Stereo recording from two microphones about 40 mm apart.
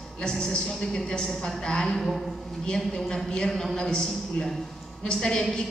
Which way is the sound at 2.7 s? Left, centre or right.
Centre.